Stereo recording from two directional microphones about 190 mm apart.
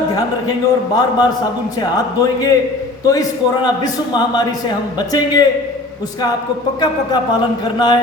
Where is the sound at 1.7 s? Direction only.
20° left (ahead or behind).